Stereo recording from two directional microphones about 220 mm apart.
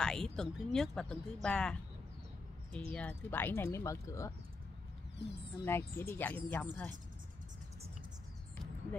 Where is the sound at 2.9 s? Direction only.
5° left (ahead or behind).